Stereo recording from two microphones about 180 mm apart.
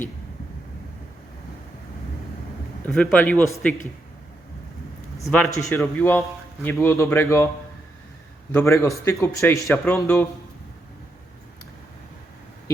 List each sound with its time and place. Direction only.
2.8 s a man's voice: 5° left (ahead or behind)
5.5 s a man's voice: 15° left (ahead or behind)
8.5 s a man's voice: 15° left (ahead or behind)